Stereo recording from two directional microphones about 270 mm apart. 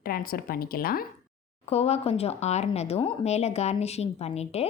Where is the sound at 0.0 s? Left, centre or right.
Left.